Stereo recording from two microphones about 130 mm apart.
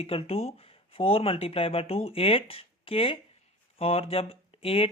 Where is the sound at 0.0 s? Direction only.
50° left (ahead or behind).